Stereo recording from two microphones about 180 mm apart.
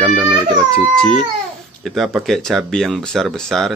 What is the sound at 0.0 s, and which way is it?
Baby cry, centre (ahead or behind).